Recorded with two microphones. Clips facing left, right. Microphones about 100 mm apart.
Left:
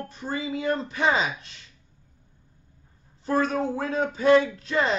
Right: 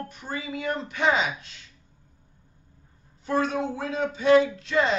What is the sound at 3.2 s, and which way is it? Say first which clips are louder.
Speech: left 1 dB; 40° left (ahead or behind).